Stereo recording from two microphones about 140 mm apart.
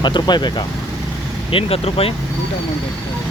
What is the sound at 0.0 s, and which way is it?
Speech, 30° left (ahead or behind).